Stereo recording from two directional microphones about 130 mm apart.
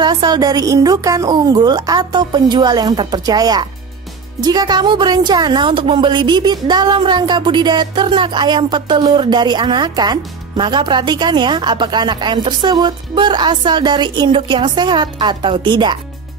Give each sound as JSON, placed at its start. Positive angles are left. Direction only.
{"t": 0.0, "sound": "speech", "side_deg": -30}